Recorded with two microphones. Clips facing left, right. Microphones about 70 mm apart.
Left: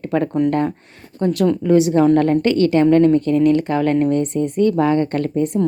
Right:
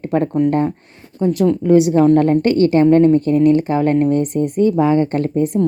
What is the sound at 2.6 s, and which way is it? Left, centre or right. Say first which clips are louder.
Speech: right 2 dB; right.